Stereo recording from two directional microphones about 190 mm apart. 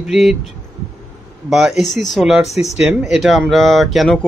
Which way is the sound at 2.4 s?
35° left (ahead or behind).